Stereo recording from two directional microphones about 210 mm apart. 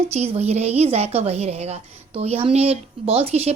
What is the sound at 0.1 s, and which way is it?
A woman's voice, 30° right (ahead or behind).